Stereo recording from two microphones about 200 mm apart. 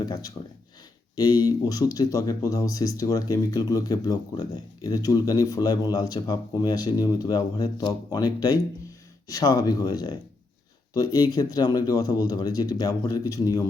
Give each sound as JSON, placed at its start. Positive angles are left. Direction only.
{"t": 0.0, "sound": "speech", "side_deg": 20}